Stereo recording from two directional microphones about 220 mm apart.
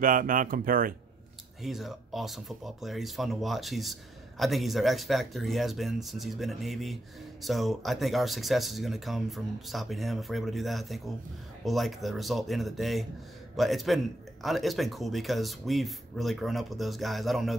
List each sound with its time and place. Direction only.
0.0 s speech: 40° right (ahead or behind)
1.6 s speech: centre (ahead or behind)